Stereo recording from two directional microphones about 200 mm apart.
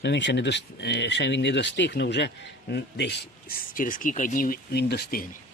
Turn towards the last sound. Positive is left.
turn(degrees=50)  # may be behind; listen again after turning